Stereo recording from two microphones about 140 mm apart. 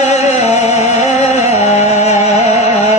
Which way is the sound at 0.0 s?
50° left (ahead or behind).